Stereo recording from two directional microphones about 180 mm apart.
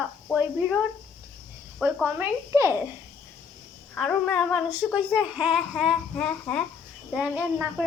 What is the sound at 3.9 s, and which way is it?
A child's voice, 5° left (ahead or behind).